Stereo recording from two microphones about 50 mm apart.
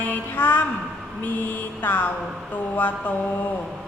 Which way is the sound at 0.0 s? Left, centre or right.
Left.